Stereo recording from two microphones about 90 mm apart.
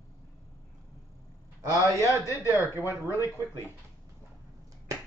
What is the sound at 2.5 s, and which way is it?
Speech, 35° left (ahead or behind).